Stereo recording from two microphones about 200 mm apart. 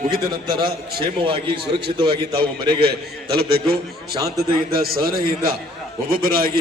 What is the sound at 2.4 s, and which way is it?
A man's voice, 50° right (ahead or behind).